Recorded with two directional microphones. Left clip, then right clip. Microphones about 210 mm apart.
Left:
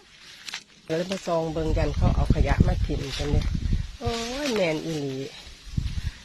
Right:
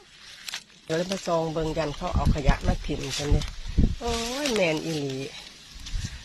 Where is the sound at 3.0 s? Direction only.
50° right (ahead or behind).